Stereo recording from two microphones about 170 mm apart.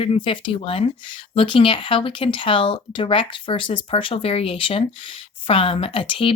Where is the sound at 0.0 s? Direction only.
30° left (ahead or behind).